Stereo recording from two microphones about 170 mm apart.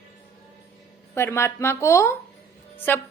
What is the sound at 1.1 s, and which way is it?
Speech, 15° left (ahead or behind).